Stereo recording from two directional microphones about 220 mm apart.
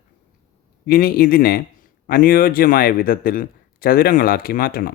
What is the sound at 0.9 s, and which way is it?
Speech, 40° left (ahead or behind).